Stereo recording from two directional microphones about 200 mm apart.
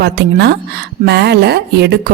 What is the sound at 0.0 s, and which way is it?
A woman's voice, 55° right (ahead or behind).